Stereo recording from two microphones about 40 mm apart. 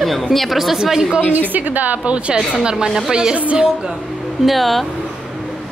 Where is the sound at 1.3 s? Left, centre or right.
Right.